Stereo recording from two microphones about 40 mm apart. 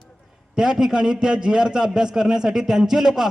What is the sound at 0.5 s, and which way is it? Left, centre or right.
A man's voice, centre.